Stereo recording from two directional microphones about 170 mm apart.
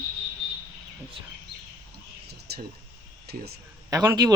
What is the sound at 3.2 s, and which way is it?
Speech, 65° right (ahead or behind).